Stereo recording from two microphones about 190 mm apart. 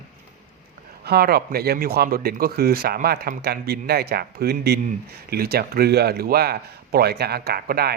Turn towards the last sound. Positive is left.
turn(degrees=-55)  # may be behind; listen again after turning